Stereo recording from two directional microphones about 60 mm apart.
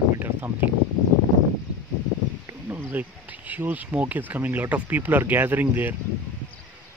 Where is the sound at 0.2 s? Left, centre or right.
Right.